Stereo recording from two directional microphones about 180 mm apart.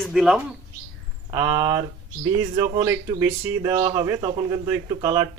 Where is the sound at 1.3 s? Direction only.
20° right (ahead or behind).